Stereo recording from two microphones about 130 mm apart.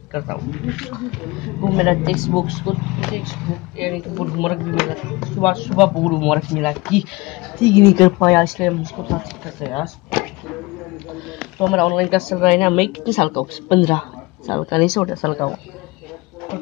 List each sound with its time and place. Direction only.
0.1 s speech: centre (ahead or behind)
7.7 s speech: 30° left (ahead or behind)
8.2 s speech: 5° left (ahead or behind)
11.3 s speech: centre (ahead or behind)
13.1 s speech: 50° left (ahead or behind)
14.9 s speech: centre (ahead or behind)